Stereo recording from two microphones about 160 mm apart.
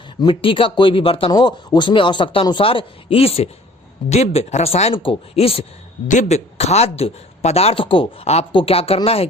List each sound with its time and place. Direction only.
0.2 s a man's voice: 30° left (ahead or behind)